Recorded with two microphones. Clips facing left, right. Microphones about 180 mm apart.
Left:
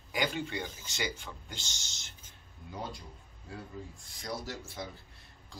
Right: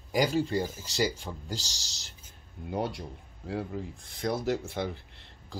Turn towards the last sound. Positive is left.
turn(degrees=-65)  # may be behind; listen again after turning